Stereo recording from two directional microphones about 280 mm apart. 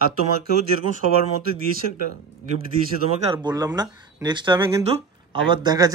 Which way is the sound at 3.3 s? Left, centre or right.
Centre.